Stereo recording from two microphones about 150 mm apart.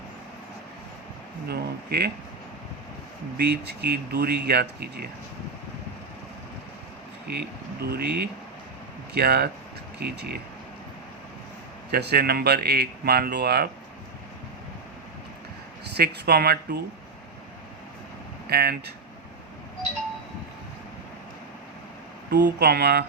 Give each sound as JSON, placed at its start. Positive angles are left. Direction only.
{"t": 1.5, "sound": "speech", "side_deg": -90}
{"t": 3.3, "sound": "speech", "side_deg": -90}
{"t": 7.3, "sound": "speech", "side_deg": -90}
{"t": 11.9, "sound": "speech", "side_deg": -90}
{"t": 16.0, "sound": "speech", "side_deg": -90}
{"t": 18.4, "sound": "speech", "side_deg": -90}
{"t": 22.3, "sound": "speech", "side_deg": -90}